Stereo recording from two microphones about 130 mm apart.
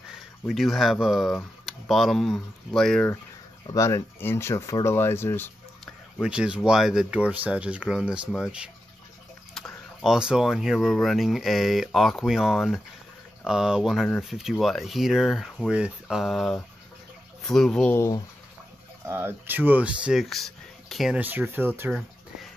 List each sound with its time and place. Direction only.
0.1 s speech: centre (ahead or behind)
3.7 s speech: 25° left (ahead or behind)
6.2 s speech: 5° right (ahead or behind)
17.9 s speech: 20° left (ahead or behind)
19.0 s speech: 15° right (ahead or behind); by 21.2 s centre (ahead or behind)
21.2 s speech: 15° right (ahead or behind)